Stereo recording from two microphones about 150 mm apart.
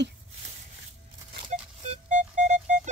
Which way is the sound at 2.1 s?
50° right (ahead or behind).